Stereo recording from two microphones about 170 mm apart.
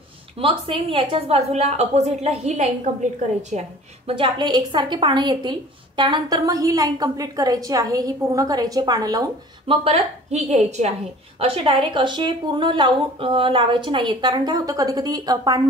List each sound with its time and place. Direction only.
0.4 s a woman's voice: 30° right (ahead or behind)
4.1 s a woman's voice: 30° right (ahead or behind)
9.8 s a woman's voice: 40° right (ahead or behind); by 15.6 s 20° right (ahead or behind)